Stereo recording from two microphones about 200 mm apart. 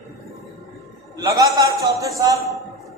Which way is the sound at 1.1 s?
15° right (ahead or behind).